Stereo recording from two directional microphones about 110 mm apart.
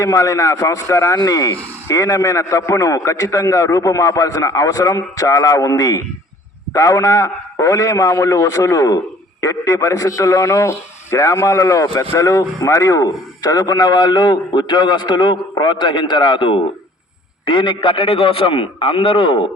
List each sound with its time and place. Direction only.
0.0 s a man's voice: 30° left (ahead or behind); by 19.5 s 50° left (ahead or behind)